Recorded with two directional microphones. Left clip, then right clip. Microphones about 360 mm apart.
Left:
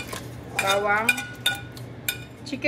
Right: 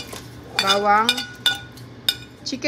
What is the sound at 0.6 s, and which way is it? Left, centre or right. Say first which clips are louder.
Speech: right 5 dB; centre.